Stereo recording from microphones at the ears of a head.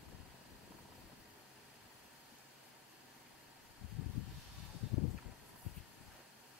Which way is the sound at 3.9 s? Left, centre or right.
Left.